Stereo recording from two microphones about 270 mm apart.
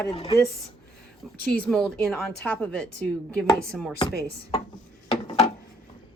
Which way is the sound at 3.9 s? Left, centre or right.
Centre.